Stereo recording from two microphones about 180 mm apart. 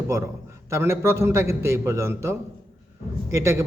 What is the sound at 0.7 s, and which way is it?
A man's voice, 15° right (ahead or behind).